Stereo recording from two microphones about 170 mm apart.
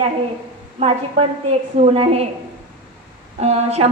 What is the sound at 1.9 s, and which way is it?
Speech, 35° right (ahead or behind).